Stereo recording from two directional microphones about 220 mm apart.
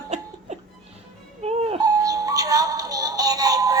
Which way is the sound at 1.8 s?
15° right (ahead or behind).